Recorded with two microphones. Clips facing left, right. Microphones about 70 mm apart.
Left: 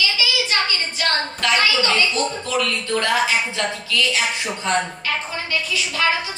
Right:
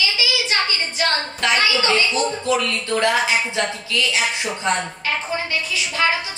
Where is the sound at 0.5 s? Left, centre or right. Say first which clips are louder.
Even; centre.